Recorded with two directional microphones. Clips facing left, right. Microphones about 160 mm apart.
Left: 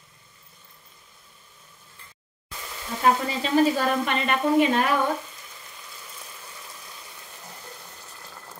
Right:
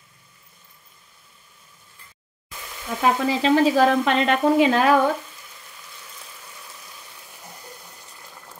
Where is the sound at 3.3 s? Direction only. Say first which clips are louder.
Right 3 dB; 90° right.